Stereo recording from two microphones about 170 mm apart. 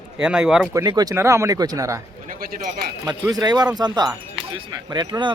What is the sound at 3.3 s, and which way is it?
Speech, 25° right (ahead or behind).